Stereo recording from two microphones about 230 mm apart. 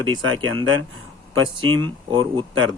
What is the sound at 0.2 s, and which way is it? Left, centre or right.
Speech, right.